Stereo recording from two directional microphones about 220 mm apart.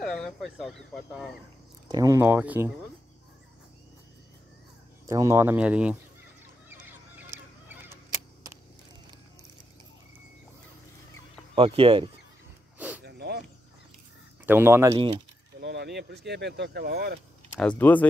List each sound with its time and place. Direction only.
0.0 s speech: centre (ahead or behind)
1.9 s speech: 15° right (ahead or behind)
5.0 s speech: 15° right (ahead or behind)
6.7 s cluck: 10° right (ahead or behind)
11.5 s speech: 25° right (ahead or behind)
12.7 s a sound: 5° right (ahead or behind)
13.0 s a sound: 45° right (ahead or behind)
14.4 s speech: 10° right (ahead or behind)
15.6 s speech: 50° right (ahead or behind)
17.6 s speech: 5° left (ahead or behind)